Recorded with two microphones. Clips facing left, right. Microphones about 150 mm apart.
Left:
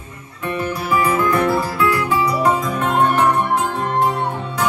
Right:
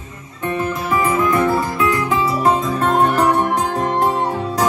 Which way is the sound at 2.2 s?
25° right (ahead or behind).